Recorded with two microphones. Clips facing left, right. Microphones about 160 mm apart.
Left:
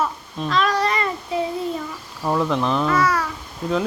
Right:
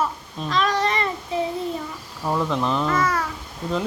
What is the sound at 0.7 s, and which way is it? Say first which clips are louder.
Speech: left 1 dB; 25° right (ahead or behind).